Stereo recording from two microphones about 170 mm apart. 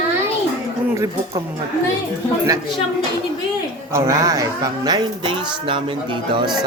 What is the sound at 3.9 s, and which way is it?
Speech, 20° right (ahead or behind).